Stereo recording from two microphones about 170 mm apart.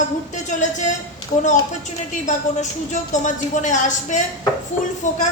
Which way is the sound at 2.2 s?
45° left (ahead or behind).